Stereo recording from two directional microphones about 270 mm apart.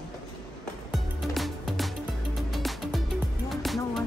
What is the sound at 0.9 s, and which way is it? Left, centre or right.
Music, centre.